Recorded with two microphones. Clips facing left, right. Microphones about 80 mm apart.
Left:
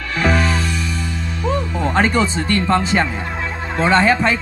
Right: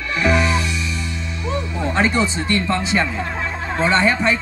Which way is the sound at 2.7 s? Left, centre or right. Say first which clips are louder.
Left 3 dB; left.